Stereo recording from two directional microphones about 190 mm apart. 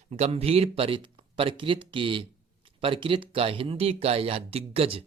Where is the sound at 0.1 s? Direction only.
35° right (ahead or behind).